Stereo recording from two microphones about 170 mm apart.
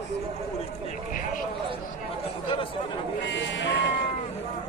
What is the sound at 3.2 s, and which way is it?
Sheep, 90° left.